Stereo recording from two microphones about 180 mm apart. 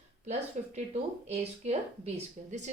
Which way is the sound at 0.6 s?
40° right (ahead or behind).